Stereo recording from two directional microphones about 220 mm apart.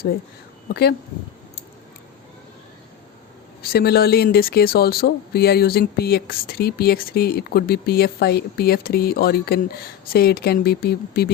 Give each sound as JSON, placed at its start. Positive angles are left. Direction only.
{"t": 0.7, "sound": "speech", "side_deg": 45}
{"t": 3.6, "sound": "speech", "side_deg": 45}